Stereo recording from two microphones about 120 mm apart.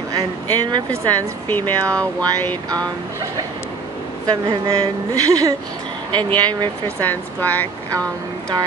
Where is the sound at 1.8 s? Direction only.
25° right (ahead or behind).